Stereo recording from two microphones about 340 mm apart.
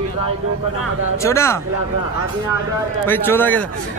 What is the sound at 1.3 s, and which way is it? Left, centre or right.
Speech, centre.